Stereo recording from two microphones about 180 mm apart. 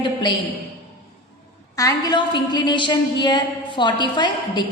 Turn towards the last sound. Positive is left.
turn(degrees=25)  # may be behind; listen again after turning